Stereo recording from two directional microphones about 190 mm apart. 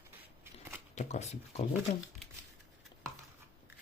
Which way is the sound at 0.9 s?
35° left (ahead or behind).